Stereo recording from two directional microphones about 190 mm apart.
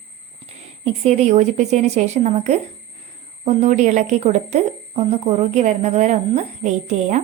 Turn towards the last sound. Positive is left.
turn(degrees=-40)  # may be behind; listen again after turning